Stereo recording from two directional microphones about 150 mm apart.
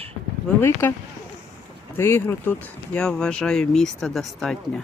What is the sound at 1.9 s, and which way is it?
Speech, 15° left (ahead or behind).